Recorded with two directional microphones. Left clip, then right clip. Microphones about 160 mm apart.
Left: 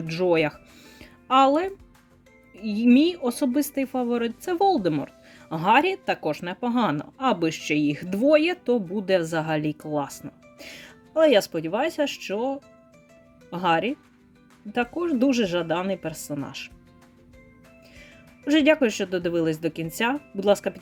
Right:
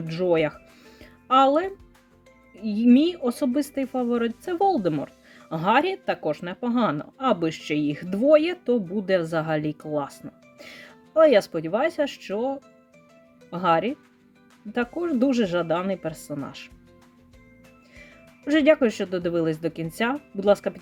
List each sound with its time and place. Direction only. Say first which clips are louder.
0.1 s speech: even; 20° left (ahead or behind)
0.9 s music: even; 15° left (ahead or behind)
2.6 s speech: even; 15° left (ahead or behind)
17.9 s speech: right 3 dB; 15° left (ahead or behind)